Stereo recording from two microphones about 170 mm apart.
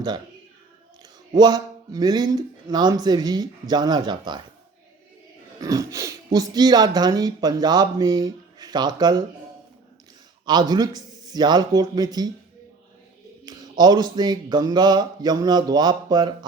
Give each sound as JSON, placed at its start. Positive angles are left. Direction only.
{"t": 1.4, "sound": "speech", "side_deg": -25}
{"t": 5.5, "sound": "speech", "side_deg": -20}
{"t": 10.4, "sound": "speech", "side_deg": -25}
{"t": 13.4, "sound": "speech", "side_deg": -25}